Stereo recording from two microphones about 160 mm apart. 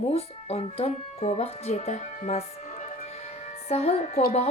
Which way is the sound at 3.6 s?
40° left (ahead or behind).